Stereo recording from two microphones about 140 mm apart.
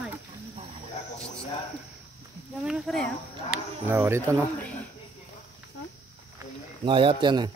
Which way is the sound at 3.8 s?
15° right (ahead or behind).